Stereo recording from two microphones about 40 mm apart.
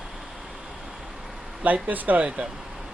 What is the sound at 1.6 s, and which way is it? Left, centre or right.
Speech, right.